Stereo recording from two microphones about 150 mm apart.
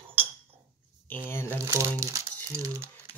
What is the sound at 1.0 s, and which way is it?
Speech, 15° left (ahead or behind).